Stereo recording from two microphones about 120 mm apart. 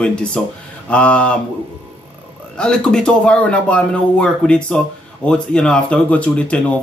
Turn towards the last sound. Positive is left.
turn(degrees=10)  # may be behind; listen again after turning